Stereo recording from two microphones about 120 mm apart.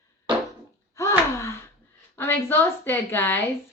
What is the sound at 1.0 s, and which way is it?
Gasp, 25° left (ahead or behind).